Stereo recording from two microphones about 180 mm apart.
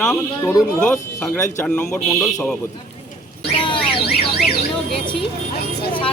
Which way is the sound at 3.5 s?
30° left (ahead or behind).